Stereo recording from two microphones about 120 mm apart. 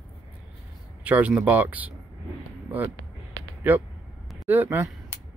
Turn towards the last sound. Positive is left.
turn(degrees=-15)  # may be behind; listen again after turning